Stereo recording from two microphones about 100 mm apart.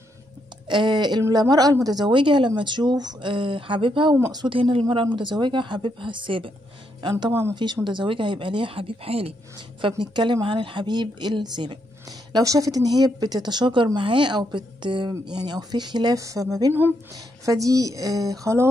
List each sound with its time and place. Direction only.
0.7 s speech: 50° right (ahead or behind)
4.6 s speech: 60° right (ahead or behind)
7.0 s speech: 45° right (ahead or behind); by 9.3 s 75° right (ahead or behind)
9.8 s speech: 55° right (ahead or behind)
12.3 s speech: 40° right (ahead or behind)
16.2 s speech: 35° right (ahead or behind)